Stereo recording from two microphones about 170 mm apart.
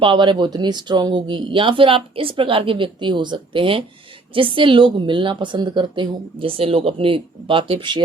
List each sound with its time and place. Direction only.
0.0 s speech: 30° right (ahead or behind)